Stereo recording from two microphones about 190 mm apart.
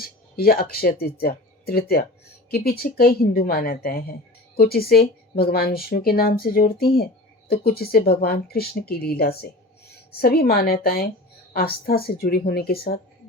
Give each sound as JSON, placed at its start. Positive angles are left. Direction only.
{"t": 0.0, "sound": "speech", "side_deg": 50}